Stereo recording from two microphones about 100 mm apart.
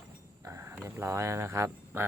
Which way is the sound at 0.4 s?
30° right (ahead or behind).